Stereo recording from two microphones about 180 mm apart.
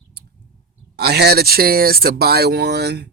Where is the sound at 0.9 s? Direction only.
65° right (ahead or behind).